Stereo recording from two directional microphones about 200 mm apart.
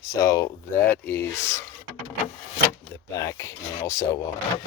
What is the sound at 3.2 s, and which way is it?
Speech, 15° left (ahead or behind).